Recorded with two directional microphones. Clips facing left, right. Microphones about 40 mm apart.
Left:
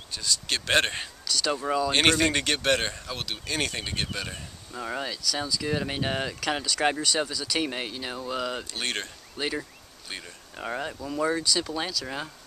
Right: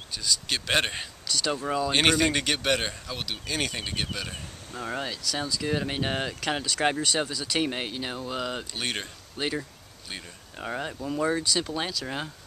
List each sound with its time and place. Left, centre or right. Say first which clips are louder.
0.1 s a man's voice: even; centre
1.2 s speech: even; centre
1.5 s a man's voice: left 1 dB; centre